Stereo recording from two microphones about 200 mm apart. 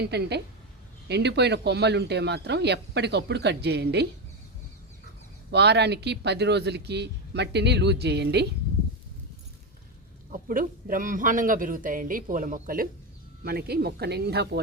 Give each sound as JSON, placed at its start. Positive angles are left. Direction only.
{"t": 0.0, "sound": "speech", "side_deg": -55}
{"t": 5.5, "sound": "speech", "side_deg": -55}
{"t": 10.3, "sound": "a man's voice", "side_deg": -45}